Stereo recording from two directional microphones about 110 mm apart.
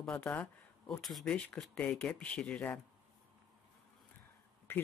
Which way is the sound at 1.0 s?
Centre (ahead or behind).